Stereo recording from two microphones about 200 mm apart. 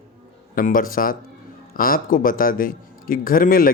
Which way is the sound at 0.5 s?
45° left (ahead or behind).